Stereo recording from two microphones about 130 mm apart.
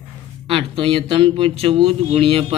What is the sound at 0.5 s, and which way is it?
Speech, 45° right (ahead or behind).